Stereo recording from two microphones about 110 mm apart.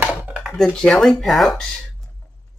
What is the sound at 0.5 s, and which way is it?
Speech, 5° left (ahead or behind).